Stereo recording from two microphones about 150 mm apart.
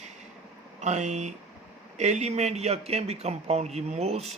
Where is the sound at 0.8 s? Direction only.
50° right (ahead or behind).